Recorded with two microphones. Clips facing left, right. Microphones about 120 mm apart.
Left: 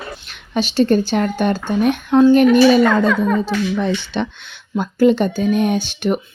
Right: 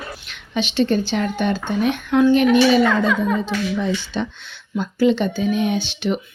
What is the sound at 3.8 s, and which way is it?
Speech, 65° left (ahead or behind).